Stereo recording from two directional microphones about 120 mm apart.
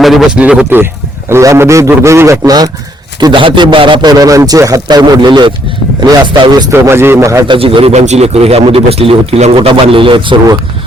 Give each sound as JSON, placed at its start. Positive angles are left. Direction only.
{"t": 0.0, "sound": "speech", "side_deg": -5}
{"t": 1.3, "sound": "a man's voice", "side_deg": -25}
{"t": 3.2, "sound": "a man's voice", "side_deg": -40}
{"t": 6.7, "sound": "a man's voice", "side_deg": -20}
{"t": 7.4, "sound": "a man's voice", "side_deg": -45}
{"t": 7.9, "sound": "a man's voice", "side_deg": -70}
{"t": 9.6, "sound": "a man's voice", "side_deg": -45}